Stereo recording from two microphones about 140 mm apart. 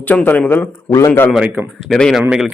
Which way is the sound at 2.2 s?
5° right (ahead or behind).